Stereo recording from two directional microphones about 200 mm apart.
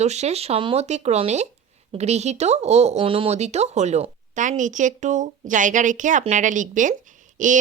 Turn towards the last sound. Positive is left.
turn(degrees=-40)  # may be behind; listen again after turning